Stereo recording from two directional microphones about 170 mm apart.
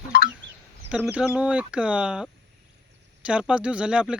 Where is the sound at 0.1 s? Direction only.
65° left (ahead or behind).